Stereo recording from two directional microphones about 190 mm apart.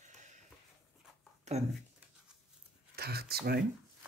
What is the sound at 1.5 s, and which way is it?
Speech, 35° right (ahead or behind).